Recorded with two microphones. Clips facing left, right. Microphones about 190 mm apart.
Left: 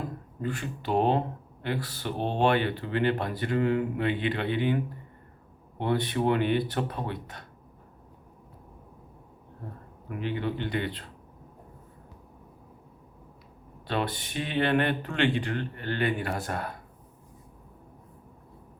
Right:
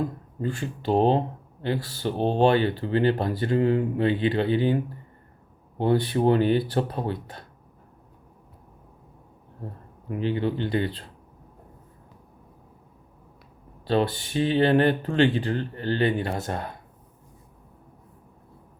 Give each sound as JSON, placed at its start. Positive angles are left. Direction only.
{"t": 0.4, "sound": "speech", "side_deg": -30}
{"t": 10.1, "sound": "speech", "side_deg": -30}
{"t": 13.8, "sound": "speech", "side_deg": -30}